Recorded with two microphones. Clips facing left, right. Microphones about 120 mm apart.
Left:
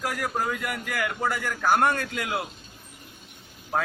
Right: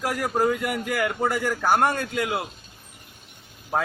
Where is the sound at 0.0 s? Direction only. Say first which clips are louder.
Right 5 dB; 30° right (ahead or behind).